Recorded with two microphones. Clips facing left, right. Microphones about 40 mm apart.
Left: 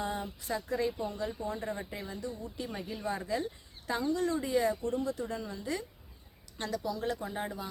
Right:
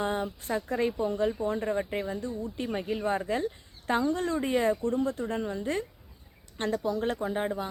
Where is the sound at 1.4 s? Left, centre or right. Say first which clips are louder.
Right 7 dB; right.